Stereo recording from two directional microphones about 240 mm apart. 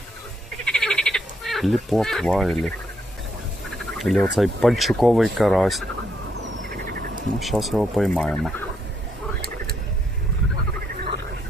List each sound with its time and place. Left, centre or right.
0.6 s frog: centre
3.9 s speech: centre
6.4 s frog: right
7.3 s speech: centre